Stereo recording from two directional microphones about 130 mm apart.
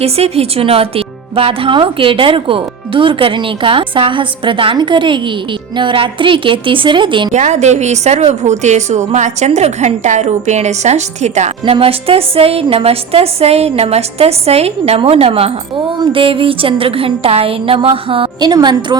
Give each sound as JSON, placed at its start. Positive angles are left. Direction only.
{"t": 0.0, "sound": "speech", "side_deg": -50}
{"t": 7.3, "sound": "a woman's voice", "side_deg": -60}
{"t": 11.6, "sound": "a woman's voice", "side_deg": -45}